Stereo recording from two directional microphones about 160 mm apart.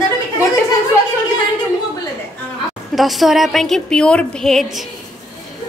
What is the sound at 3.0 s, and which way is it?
A woman's voice, centre (ahead or behind).